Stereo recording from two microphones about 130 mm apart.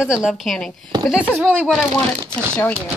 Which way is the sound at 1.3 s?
10° right (ahead or behind).